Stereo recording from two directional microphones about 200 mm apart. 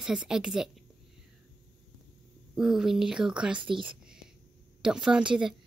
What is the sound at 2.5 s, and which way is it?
Speech, 5° right (ahead or behind).